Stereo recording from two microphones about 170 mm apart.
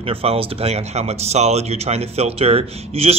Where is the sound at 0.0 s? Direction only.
35° right (ahead or behind).